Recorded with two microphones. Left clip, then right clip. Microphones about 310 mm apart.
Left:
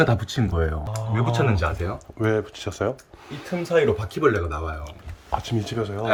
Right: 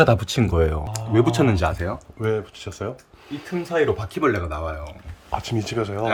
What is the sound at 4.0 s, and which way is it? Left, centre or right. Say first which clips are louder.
Speech: left 1 dB; centre.